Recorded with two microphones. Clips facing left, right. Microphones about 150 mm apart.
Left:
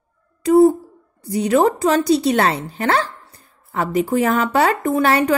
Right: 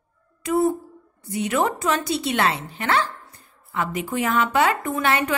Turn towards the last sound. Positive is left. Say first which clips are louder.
# left 6 dB
turn(degrees=35)  # may be behind; listen again after turning